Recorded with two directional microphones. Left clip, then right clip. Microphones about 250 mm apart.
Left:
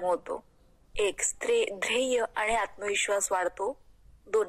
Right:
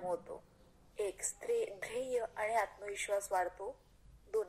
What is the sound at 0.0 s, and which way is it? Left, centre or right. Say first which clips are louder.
A woman's voice: left 11 dB; left.